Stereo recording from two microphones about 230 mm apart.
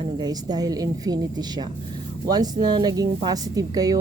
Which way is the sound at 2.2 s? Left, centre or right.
Centre.